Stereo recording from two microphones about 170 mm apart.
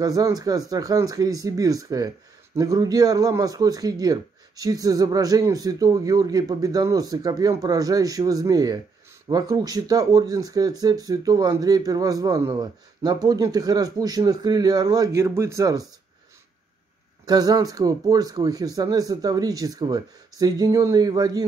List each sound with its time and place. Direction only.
0.0 s speech: 20° right (ahead or behind)
17.3 s speech: 20° right (ahead or behind)